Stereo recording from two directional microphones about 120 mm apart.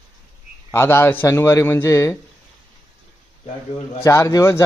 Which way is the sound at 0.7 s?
20° left (ahead or behind).